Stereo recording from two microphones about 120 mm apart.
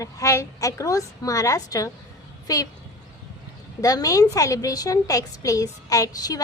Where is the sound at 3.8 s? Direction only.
30° left (ahead or behind).